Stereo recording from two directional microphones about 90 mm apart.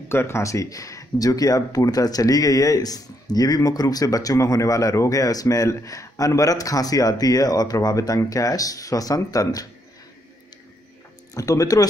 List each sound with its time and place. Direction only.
0.1 s speech: 30° left (ahead or behind)
11.3 s speech: 40° left (ahead or behind)